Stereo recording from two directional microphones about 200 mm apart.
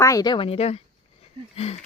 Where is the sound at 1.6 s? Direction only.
30° left (ahead or behind).